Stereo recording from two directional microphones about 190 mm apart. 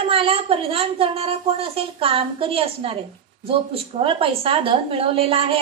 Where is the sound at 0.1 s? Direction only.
30° right (ahead or behind).